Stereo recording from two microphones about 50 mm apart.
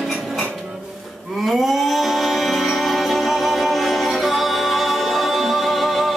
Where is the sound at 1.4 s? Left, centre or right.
Centre.